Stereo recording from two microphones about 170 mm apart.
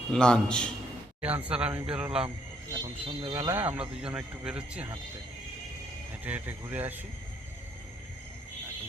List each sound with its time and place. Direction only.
0.1 s a man's voice: 5° left (ahead or behind)
1.2 s speech: 10° right (ahead or behind)
2.7 s speech: 25° right (ahead or behind)
3.3 s speech: 10° right (ahead or behind)
6.2 s speech: 10° right (ahead or behind)